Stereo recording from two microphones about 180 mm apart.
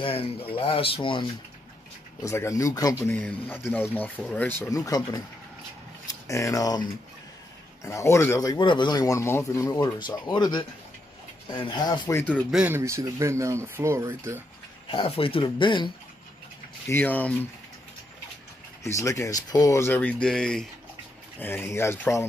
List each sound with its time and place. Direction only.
0.0 s speech: 30° left (ahead or behind)
2.2 s speech: 15° left (ahead or behind)
12.4 s speech: 5° right (ahead or behind)
14.9 s speech: 30° left (ahead or behind)
16.9 s speech: 10° left (ahead or behind)
18.9 s speech: 15° left (ahead or behind)